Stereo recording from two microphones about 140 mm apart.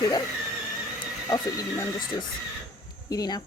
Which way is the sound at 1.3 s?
25° left (ahead or behind).